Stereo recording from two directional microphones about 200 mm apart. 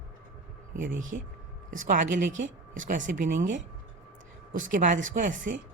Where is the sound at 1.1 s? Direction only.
45° right (ahead or behind).